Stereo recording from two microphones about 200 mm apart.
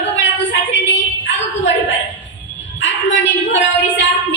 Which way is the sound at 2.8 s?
65° left (ahead or behind).